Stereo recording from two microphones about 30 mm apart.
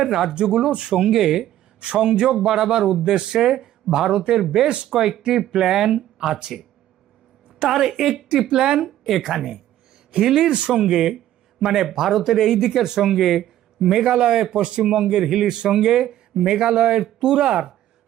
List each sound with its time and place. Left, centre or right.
0.0 s speech: centre
0.3 s speech: right
1.1 s speech: centre
1.4 s speech: right
7.7 s speech: centre
9.0 s a woman's voice: centre
10.2 s speech: centre
11.6 s speech: centre
14.0 s speech: right
17.2 s speech: right